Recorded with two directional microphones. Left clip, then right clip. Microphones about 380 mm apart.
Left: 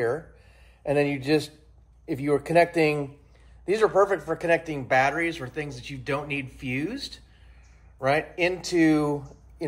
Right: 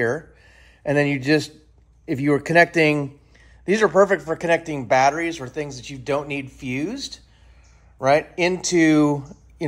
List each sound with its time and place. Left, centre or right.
0.0 s a man's voice: right